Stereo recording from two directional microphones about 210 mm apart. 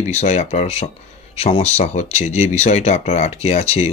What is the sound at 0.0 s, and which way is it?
Speech, 30° left (ahead or behind).